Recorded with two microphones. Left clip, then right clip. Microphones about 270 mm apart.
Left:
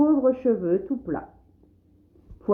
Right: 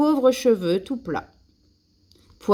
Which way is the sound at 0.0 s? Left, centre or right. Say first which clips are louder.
Right 2 dB; right.